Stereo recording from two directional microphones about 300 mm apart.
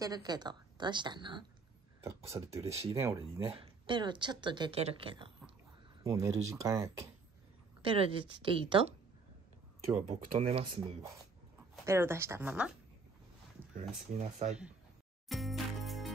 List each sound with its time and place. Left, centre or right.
0.0 s speech: centre
10.0 s speech: centre
13.6 s a sound: centre
14.1 s speech: right
15.2 s music: centre